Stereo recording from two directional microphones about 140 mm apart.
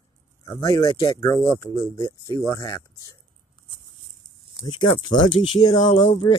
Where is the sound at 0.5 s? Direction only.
25° left (ahead or behind).